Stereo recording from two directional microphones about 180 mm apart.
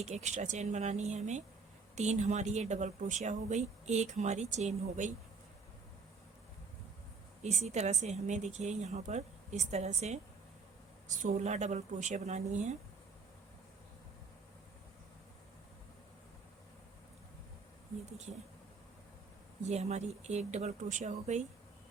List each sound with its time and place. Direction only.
0.0 s speech: 40° right (ahead or behind)
7.4 s speech: 40° right (ahead or behind)
19.6 s speech: 35° right (ahead or behind)